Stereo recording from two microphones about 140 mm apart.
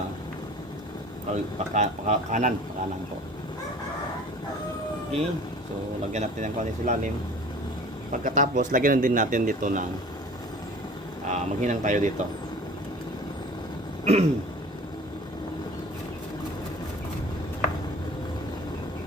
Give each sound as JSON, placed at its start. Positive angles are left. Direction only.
{"t": 1.3, "sound": "speech", "side_deg": -60}
{"t": 6.1, "sound": "speech", "side_deg": -60}
{"t": 8.1, "sound": "speech", "side_deg": -65}
{"t": 11.3, "sound": "speech", "side_deg": -60}
{"t": 14.0, "sound": "throat clearing", "side_deg": -50}